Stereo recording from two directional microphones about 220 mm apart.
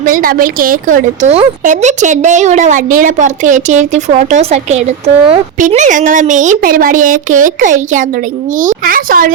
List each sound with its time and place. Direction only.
0.0 s speech: 40° right (ahead or behind)